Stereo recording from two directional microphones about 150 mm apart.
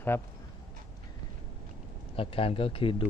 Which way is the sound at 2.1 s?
40° left (ahead or behind).